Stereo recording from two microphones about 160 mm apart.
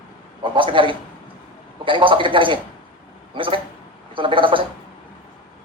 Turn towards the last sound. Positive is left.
turn(degrees=-30)  # may be behind; listen again after turning